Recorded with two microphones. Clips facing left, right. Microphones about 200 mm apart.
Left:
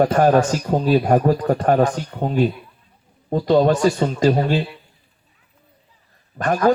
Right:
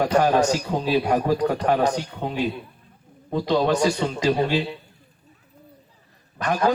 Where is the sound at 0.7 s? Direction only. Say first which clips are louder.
Left 5 dB; 45° left (ahead or behind).